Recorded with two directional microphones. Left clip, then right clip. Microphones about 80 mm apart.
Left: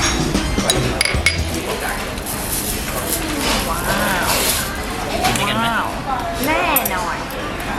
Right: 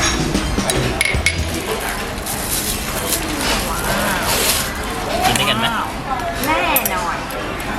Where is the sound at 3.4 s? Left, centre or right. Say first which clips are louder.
Left 1 dB; left.